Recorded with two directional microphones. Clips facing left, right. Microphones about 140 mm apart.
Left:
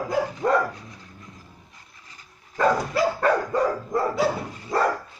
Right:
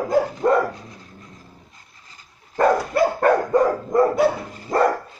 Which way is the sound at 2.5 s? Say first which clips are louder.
Right 4 dB; 55° right (ahead or behind).